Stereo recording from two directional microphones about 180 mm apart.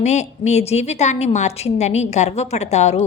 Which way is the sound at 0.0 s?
40° left (ahead or behind).